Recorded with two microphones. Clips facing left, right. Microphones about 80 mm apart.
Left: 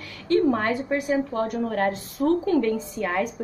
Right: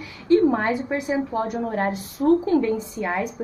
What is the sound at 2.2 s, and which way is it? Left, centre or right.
A woman's voice, centre.